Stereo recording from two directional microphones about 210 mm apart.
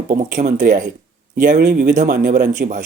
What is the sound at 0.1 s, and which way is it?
Speech, 35° right (ahead or behind).